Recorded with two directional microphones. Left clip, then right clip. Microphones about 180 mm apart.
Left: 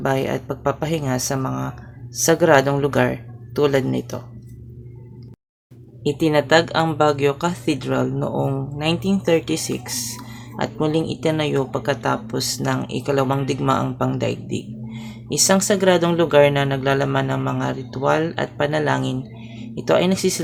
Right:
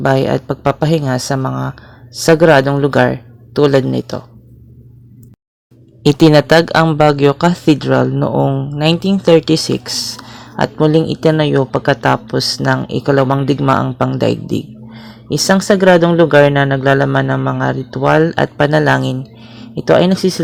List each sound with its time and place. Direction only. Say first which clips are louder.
0.0 s a man's voice: right 8 dB; 35° right (ahead or behind)
6.0 s speech: right 9 dB; 45° right (ahead or behind); by 20.4 s 30° right (ahead or behind)